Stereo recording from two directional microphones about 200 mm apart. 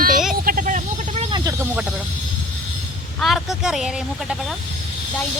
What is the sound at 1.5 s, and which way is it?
Snake, 10° right (ahead or behind).